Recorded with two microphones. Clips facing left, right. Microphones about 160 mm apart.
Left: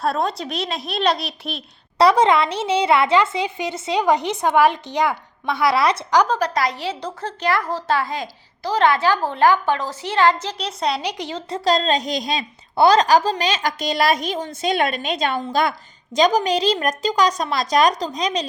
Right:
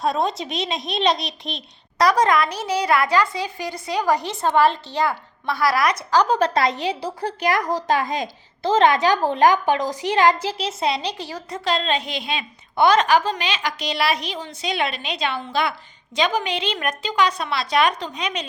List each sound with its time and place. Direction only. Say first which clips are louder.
0.0 s a woman's voice: even; centre (ahead or behind)
2.0 s a woman's voice: left 3 dB; 25° left (ahead or behind)
6.4 s a woman's voice: right 2 dB; 25° right (ahead or behind)
10.4 s a woman's voice: right 1 dB; 5° right (ahead or behind)
11.0 s a child's voice: left 2 dB; 20° left (ahead or behind); by 18.4 s 35° left (ahead or behind)